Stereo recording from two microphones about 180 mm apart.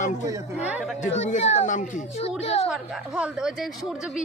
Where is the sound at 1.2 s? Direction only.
40° left (ahead or behind).